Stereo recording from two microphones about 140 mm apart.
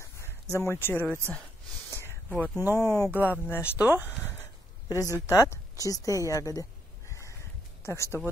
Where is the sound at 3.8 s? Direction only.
10° right (ahead or behind).